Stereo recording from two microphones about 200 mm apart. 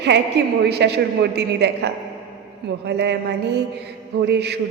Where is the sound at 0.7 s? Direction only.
55° right (ahead or behind).